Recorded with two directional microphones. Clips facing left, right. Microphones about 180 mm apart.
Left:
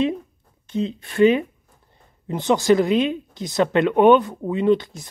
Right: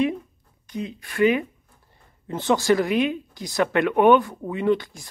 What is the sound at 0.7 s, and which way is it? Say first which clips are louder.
Speech: left 6 dB; 25° left (ahead or behind).